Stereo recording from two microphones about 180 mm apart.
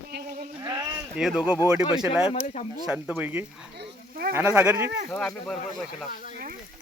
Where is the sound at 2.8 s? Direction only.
5° right (ahead or behind).